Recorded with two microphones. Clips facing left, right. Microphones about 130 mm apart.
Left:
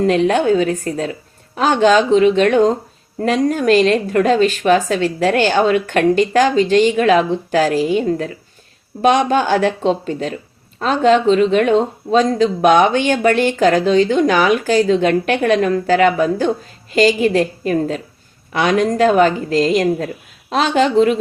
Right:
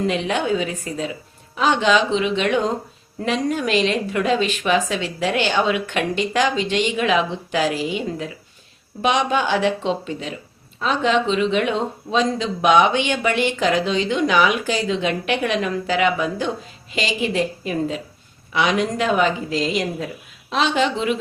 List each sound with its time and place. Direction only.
0.0 s speech: 45° left (ahead or behind)